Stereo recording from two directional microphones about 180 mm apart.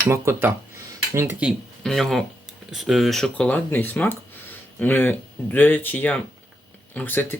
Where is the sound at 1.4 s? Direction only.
Centre (ahead or behind).